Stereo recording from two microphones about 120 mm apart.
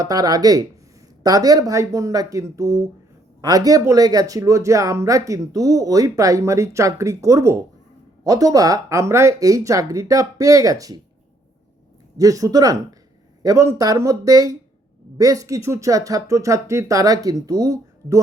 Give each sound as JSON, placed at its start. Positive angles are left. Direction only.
{"t": 0.0, "sound": "speech", "side_deg": -30}
{"t": 12.1, "sound": "speech", "side_deg": -30}